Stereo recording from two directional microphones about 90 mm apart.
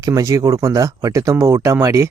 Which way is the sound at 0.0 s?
40° right (ahead or behind).